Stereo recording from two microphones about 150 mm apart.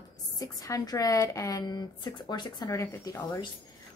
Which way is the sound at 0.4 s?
25° left (ahead or behind).